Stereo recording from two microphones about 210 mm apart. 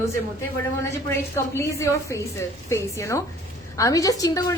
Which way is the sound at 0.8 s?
10° left (ahead or behind).